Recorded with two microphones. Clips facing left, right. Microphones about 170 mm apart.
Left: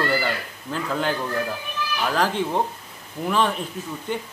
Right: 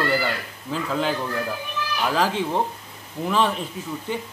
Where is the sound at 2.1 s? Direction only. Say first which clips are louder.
Even; centre (ahead or behind).